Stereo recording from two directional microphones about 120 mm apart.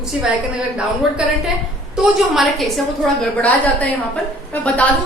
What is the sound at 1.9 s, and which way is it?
Speech, 5° right (ahead or behind).